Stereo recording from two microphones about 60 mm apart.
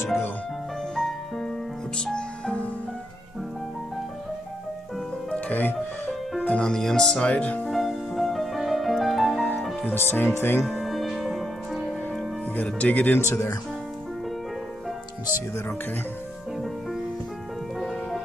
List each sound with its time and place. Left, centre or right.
0.9 s music: centre
5.5 s speech: left
6.4 s music: left
6.7 s speech: centre
7.7 s music: centre
9.9 s speech: left
10.6 s music: centre
12.6 s speech: left
13.3 s speech: left
16.5 s music: centre